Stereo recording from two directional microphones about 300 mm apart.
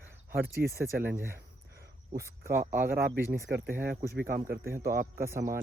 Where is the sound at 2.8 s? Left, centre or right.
Right.